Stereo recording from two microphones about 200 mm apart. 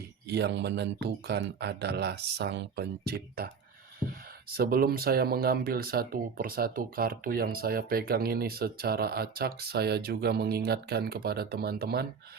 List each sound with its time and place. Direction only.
0.3 s speech: 55° right (ahead or behind)
4.5 s speech: 45° right (ahead or behind)